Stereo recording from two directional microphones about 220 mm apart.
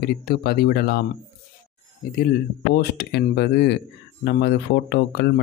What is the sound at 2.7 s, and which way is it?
Speech, 45° left (ahead or behind).